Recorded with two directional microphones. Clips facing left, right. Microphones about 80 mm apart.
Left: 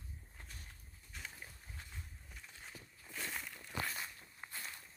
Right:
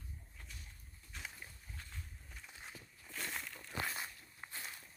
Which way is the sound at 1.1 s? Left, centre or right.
Centre.